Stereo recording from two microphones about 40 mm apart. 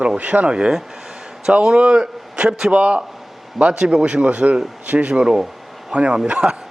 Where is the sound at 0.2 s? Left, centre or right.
Right.